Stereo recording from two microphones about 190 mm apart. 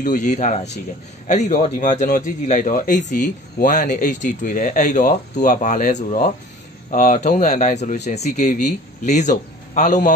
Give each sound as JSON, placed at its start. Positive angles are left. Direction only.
{"t": 0.0, "sound": "a man's voice", "side_deg": 40}